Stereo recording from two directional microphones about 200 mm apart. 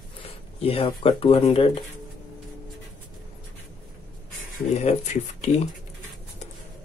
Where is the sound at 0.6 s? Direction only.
30° left (ahead or behind).